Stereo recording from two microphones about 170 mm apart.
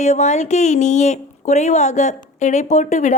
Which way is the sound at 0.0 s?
45° left (ahead or behind).